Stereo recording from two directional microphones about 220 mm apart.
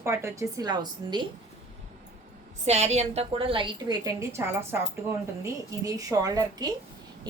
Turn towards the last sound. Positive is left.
turn(degrees=-15)  # may be behind; listen again after turning